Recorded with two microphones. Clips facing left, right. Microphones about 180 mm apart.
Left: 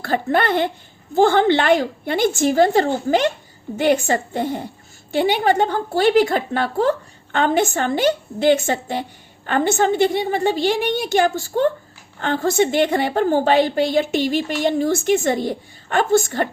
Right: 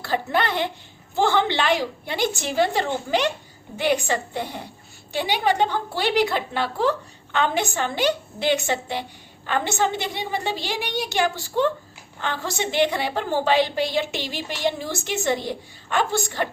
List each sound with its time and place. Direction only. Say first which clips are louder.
0.0 s a woman's voice: left 4 dB; 50° left (ahead or behind)